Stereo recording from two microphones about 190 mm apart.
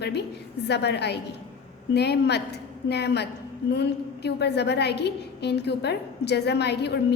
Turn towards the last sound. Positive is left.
turn(degrees=60)  # may be behind; listen again after turning